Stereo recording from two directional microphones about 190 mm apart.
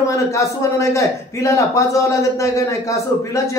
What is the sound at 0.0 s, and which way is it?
A man's voice, 15° left (ahead or behind).